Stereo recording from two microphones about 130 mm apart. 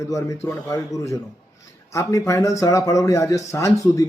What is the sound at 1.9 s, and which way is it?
Speech, 25° left (ahead or behind).